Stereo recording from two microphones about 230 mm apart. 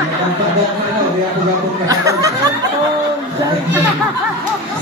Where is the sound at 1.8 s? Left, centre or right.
Centre.